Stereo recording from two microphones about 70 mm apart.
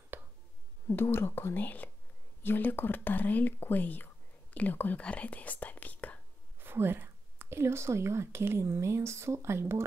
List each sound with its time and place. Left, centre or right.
0.8 s speech: left
6.6 s speech: right